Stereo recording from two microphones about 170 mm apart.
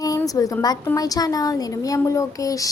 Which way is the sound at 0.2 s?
20° left (ahead or behind).